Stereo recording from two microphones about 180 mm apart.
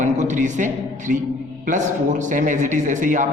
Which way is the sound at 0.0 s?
45° right (ahead or behind).